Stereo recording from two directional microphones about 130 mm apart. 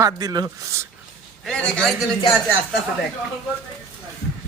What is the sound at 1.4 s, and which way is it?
Speech, 5° left (ahead or behind).